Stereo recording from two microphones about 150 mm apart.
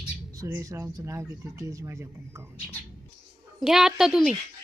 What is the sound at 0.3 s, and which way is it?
Speech, 20° right (ahead or behind).